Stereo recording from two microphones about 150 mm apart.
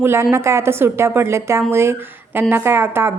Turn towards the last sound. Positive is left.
turn(degrees=-15)  # may be behind; listen again after turning